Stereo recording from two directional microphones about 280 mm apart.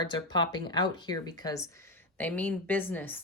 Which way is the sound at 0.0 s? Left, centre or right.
Centre.